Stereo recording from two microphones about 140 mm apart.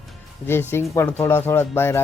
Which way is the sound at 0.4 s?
15° left (ahead or behind).